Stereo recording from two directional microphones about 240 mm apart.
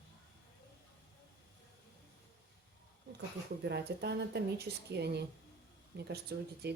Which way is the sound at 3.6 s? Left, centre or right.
Right.